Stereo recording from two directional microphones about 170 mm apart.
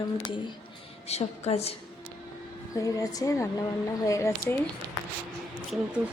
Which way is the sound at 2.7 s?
20° left (ahead or behind).